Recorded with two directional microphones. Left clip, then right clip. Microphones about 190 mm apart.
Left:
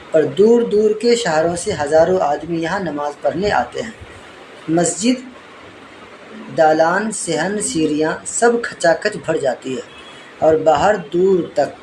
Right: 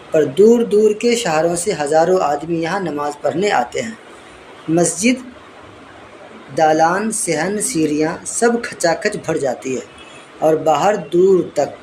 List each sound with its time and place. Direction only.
0.1 s speech: 10° right (ahead or behind)
6.6 s speech: 10° right (ahead or behind)